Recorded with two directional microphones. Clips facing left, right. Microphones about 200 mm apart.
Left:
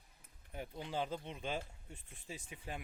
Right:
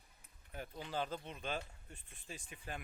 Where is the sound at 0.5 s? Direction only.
15° left (ahead or behind).